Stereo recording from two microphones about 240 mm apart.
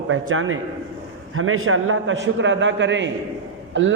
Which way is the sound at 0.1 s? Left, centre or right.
Right.